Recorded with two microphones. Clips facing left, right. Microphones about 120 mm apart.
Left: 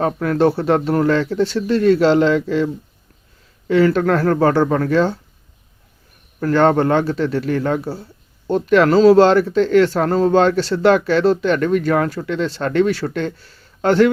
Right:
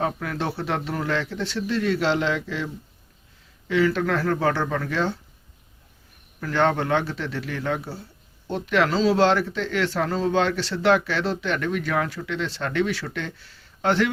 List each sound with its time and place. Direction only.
0.0 s speech: 45° left (ahead or behind)
3.7 s speech: 45° left (ahead or behind)
6.4 s speech: 45° left (ahead or behind)